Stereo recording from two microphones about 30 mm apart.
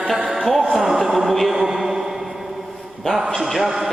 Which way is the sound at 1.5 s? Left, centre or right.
Centre.